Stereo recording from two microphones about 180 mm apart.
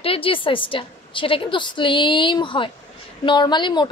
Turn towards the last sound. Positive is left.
turn(degrees=25)  # may be behind; listen again after turning